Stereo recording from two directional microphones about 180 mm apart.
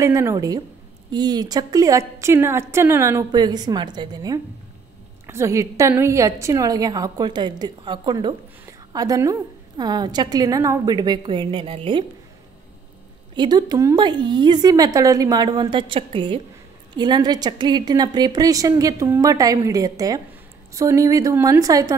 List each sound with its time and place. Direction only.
0.0 s a woman's voice: 15° right (ahead or behind)
13.3 s a woman's voice: 25° right (ahead or behind)